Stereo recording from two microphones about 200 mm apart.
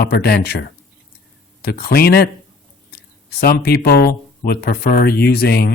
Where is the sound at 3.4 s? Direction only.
50° left (ahead or behind).